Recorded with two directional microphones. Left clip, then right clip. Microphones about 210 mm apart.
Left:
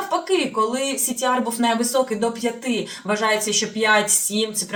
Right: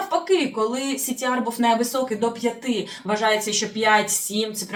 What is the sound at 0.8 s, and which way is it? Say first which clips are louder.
Speech: left 3 dB; 5° left (ahead or behind).